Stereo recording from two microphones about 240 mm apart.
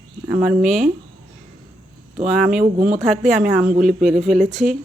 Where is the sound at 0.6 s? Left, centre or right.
Right.